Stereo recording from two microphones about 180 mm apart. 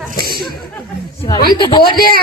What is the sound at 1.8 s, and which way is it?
Speech, 55° left (ahead or behind).